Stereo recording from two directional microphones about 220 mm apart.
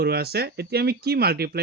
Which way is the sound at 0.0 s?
45° right (ahead or behind).